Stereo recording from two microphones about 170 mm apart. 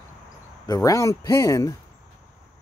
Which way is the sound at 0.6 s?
20° left (ahead or behind).